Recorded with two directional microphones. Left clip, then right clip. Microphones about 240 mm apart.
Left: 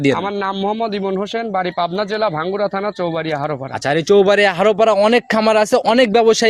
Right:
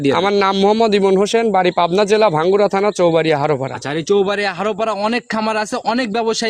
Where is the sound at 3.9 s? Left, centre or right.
Left.